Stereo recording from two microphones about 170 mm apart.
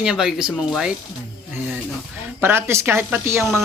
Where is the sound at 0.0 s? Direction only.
5° right (ahead or behind).